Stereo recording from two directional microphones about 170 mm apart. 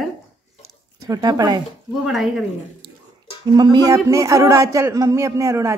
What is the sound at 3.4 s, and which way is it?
Speech, 25° right (ahead or behind).